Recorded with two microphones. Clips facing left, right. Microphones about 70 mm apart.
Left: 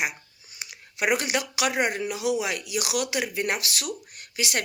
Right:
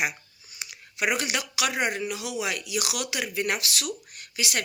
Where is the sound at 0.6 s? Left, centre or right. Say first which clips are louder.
Left 1 dB; left.